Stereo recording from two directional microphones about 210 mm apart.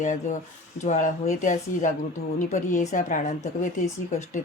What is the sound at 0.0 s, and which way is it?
Speech, 35° left (ahead or behind).